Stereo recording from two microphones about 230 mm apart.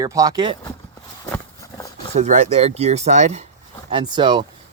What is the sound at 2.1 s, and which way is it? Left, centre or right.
Speech, right.